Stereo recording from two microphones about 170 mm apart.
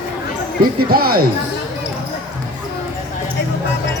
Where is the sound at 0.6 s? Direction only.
60° right (ahead or behind).